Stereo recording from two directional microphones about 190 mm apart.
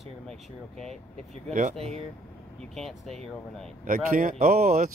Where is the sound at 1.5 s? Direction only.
40° right (ahead or behind).